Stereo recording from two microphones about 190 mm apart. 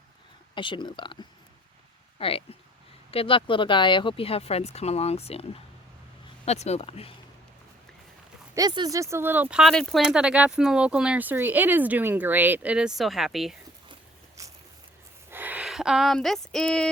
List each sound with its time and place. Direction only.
0.5 s speech: 25° left (ahead or behind)
8.5 s speech: 20° right (ahead or behind); by 13.6 s centre (ahead or behind)
14.4 s a sound: 15° right (ahead or behind)
15.3 s speech: 10° right (ahead or behind)